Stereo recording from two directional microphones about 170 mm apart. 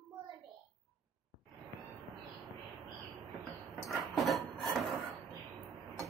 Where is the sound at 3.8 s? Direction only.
Centre (ahead or behind).